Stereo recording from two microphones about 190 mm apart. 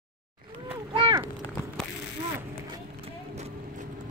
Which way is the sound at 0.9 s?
25° right (ahead or behind).